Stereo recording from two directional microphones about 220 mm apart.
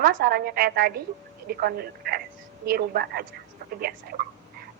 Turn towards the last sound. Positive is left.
turn(degrees=-45)  # may be behind; listen again after turning